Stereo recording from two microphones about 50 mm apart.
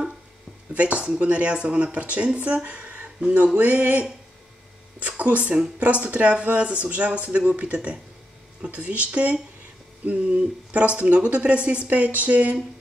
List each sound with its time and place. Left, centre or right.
0.7 s speech: right
3.5 s a sound: right
5.0 s speech: right